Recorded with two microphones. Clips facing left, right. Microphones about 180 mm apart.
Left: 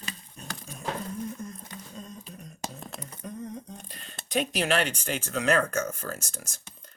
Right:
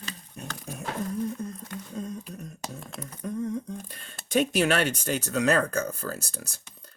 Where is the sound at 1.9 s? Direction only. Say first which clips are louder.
Right 9 dB; 55° right (ahead or behind).